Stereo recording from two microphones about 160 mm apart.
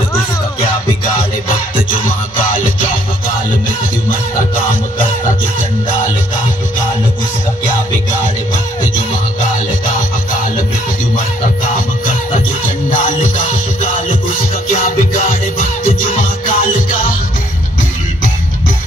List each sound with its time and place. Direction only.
1.5 s music: 60° left (ahead or behind)
12.9 s music: 50° left (ahead or behind)